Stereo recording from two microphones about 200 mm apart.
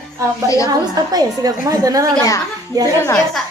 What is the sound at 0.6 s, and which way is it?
A woman's voice, 20° right (ahead or behind).